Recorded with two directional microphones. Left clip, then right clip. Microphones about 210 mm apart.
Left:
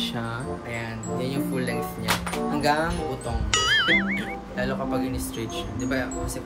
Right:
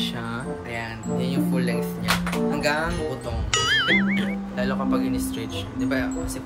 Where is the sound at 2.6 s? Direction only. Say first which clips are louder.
Left 3 dB; centre (ahead or behind).